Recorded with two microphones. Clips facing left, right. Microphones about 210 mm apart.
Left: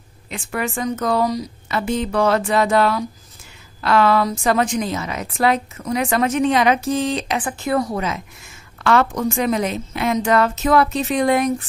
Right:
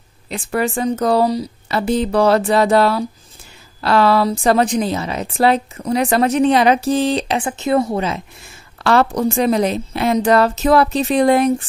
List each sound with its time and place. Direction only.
0.3 s a woman's voice: 35° right (ahead or behind)